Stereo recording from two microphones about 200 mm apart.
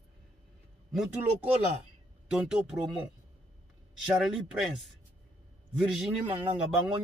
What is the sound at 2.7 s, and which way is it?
Speech, 20° right (ahead or behind).